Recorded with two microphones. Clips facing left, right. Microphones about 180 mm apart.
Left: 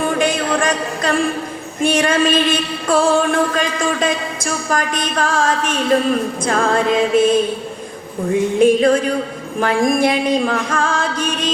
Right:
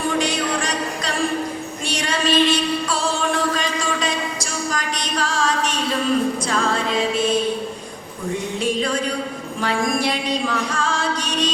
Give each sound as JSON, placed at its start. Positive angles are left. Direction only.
{"t": 0.0, "sound": "a sound", "side_deg": 55}
{"t": 1.8, "sound": "music", "side_deg": 50}
{"t": 6.4, "sound": "singing", "side_deg": 55}
{"t": 8.5, "sound": "singing", "side_deg": 50}